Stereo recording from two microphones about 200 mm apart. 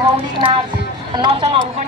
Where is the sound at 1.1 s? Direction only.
25° right (ahead or behind).